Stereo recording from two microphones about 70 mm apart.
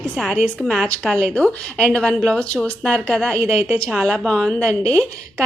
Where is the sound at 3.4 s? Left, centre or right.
Right.